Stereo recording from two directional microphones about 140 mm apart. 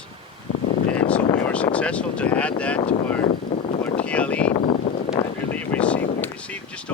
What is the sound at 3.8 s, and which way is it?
Speech, 10° left (ahead or behind).